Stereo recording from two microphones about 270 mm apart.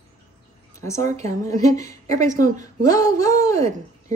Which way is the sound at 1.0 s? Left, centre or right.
Right.